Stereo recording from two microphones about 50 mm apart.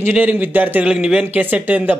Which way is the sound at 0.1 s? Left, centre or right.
Right.